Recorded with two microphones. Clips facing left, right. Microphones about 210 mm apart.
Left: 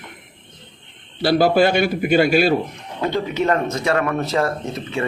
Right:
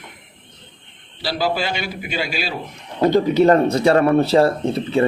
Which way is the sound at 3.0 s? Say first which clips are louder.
Right 7 dB; 35° right (ahead or behind).